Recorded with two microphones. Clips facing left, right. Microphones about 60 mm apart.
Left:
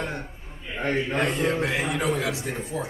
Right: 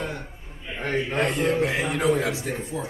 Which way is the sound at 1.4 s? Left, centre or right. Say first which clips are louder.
Right 2 dB; left.